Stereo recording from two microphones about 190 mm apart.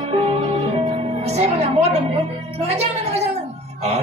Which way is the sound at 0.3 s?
35° right (ahead or behind).